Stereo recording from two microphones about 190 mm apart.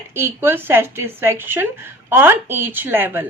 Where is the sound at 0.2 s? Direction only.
10° right (ahead or behind).